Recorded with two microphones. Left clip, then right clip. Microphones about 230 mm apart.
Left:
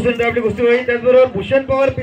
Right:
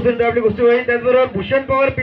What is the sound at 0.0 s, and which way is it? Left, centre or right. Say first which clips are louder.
A man's voice: right 1 dB; left.